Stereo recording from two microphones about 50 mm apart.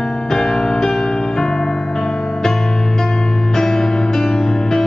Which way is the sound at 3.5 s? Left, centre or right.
Centre.